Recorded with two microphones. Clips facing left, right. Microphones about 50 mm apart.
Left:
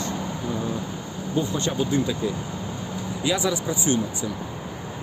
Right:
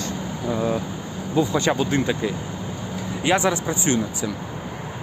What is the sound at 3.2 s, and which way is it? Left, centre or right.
Speech, right.